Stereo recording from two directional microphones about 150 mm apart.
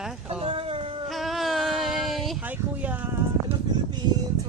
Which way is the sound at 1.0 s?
Centre (ahead or behind).